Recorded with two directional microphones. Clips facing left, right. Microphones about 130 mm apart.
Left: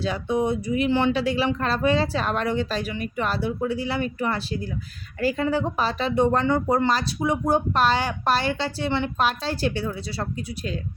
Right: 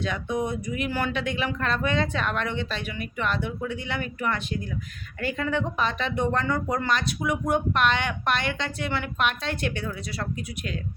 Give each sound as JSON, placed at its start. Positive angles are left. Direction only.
{"t": 0.0, "sound": "speech", "side_deg": 30}